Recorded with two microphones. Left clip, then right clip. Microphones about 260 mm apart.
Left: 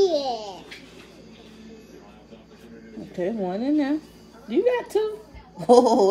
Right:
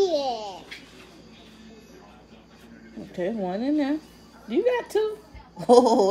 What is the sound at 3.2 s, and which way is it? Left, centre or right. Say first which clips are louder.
Speech: left 1 dB; right.